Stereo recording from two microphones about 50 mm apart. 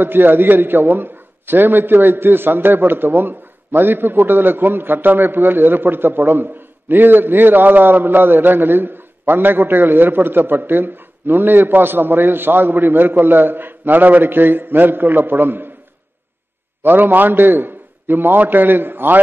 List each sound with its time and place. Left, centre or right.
0.0 s a man's voice: right
16.8 s a man's voice: right